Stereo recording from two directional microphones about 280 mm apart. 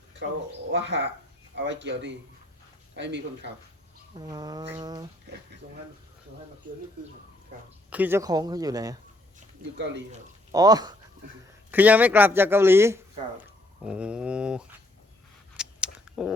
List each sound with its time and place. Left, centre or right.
0.7 s speech: right
4.2 s a man's voice: centre
7.9 s a man's voice: centre
9.7 s speech: right
10.5 s a man's voice: centre
15.5 s a sound: centre